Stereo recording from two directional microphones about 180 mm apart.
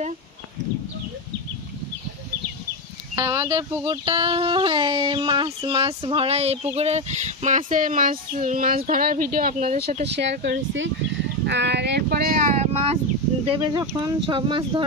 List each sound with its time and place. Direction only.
3.2 s speech: 20° right (ahead or behind); by 9.8 s 45° right (ahead or behind)
10.0 s speech: 70° right (ahead or behind); by 13.0 s 35° right (ahead or behind)
13.6 s speech: 20° right (ahead or behind)